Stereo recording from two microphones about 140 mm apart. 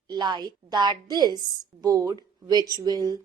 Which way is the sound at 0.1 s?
30° right (ahead or behind).